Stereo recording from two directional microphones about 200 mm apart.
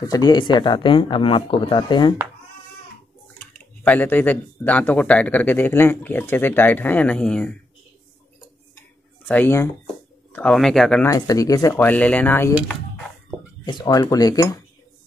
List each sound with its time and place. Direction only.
0.0 s speech: 20° left (ahead or behind)
3.8 s speech: 10° left (ahead or behind)
9.3 s speech: 10° left (ahead or behind)
11.1 s speech: 15° left (ahead or behind)
13.7 s speech: 20° left (ahead or behind)